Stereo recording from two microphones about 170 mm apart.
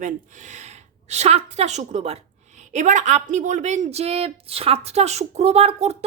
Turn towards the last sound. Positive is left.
turn(degrees=-40)  # may be behind; listen again after turning